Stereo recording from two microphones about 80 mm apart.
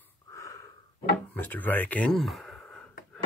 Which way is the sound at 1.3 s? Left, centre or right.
Left.